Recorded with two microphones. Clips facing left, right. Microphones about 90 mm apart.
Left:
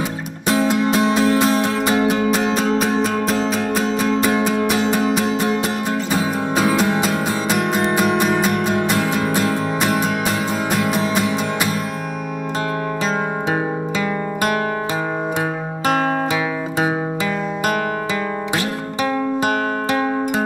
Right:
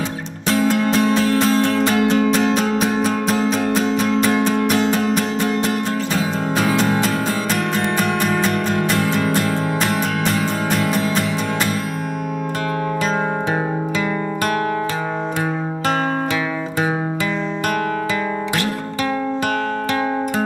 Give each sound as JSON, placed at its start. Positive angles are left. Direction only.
{"t": 0.5, "sound": "music", "side_deg": 15}
{"t": 2.3, "sound": "music", "side_deg": 5}
{"t": 13.5, "sound": "music", "side_deg": 15}